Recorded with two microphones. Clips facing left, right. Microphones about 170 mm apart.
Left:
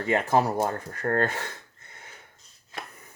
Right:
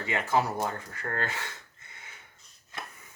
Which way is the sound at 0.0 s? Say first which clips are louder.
Left 5 dB; 45° left (ahead or behind).